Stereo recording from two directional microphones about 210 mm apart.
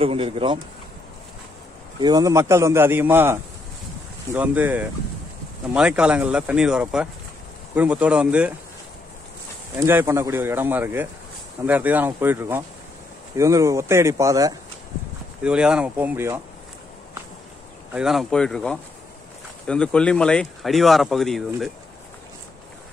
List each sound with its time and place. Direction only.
0.0 s speech: 25° right (ahead or behind)
2.0 s a man's voice: 20° right (ahead or behind)
9.8 s a man's voice: 10° right (ahead or behind)
15.4 s speech: 5° right (ahead or behind)
17.9 s speech: centre (ahead or behind)